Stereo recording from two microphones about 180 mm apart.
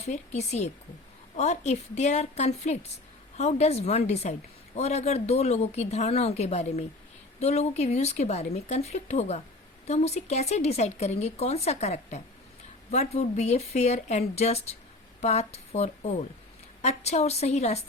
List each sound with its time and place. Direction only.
0.0 s a woman's voice: 40° left (ahead or behind)